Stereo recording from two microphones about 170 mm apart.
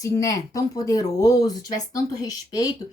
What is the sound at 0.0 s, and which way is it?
A woman's voice, 20° left (ahead or behind).